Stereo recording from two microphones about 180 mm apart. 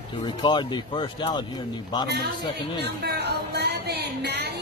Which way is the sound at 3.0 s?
65° right (ahead or behind).